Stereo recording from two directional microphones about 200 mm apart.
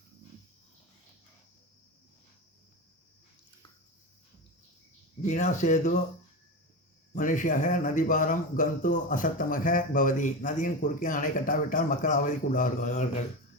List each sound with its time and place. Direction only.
5.2 s a man's voice: 35° left (ahead or behind)
7.1 s a man's voice: 40° left (ahead or behind)